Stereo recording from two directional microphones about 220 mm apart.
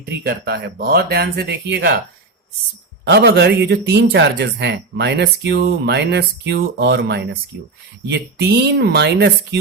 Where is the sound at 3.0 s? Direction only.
50° right (ahead or behind).